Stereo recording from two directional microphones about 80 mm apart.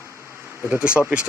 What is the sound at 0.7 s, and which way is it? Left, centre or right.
Speech, centre.